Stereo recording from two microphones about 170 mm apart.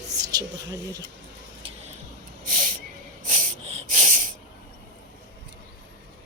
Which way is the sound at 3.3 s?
45° right (ahead or behind).